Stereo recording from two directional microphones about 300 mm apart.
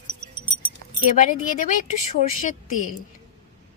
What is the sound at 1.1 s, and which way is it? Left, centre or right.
Speech, left.